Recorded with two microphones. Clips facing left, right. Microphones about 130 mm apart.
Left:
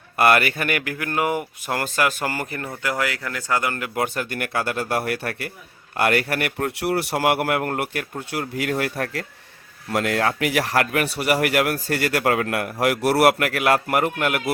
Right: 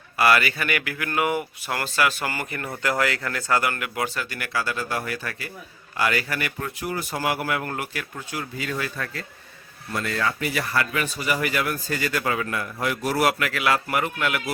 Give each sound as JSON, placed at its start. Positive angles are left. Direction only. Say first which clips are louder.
{"t": 0.2, "sound": "speech", "louder": "left 2 dB", "side_deg": 50}
{"t": 3.0, "sound": "speech", "louder": "right 1 dB", "side_deg": 15}
{"t": 3.9, "sound": "a man's voice", "louder": "left 4 dB", "side_deg": 50}
{"t": 8.3, "sound": "a man's voice", "louder": "left 6 dB", "side_deg": 70}
{"t": 9.9, "sound": "a man's voice", "louder": "left 5 dB", "side_deg": 75}